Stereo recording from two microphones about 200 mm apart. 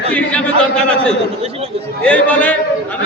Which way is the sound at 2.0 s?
5° left (ahead or behind).